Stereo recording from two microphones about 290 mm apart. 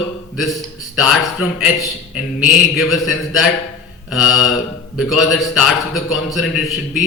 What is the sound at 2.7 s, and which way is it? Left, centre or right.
A man's voice, centre.